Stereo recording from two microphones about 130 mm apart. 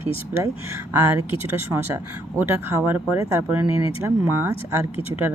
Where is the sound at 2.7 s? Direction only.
20° right (ahead or behind).